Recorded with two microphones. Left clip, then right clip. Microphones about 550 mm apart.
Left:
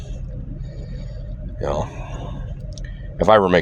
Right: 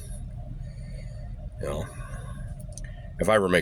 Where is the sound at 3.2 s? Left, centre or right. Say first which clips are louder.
Left 8 dB; right.